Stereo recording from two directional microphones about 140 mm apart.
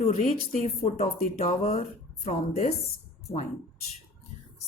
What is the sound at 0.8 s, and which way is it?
Speech, 45° left (ahead or behind).